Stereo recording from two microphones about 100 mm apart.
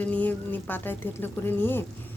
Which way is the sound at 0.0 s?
15° left (ahead or behind).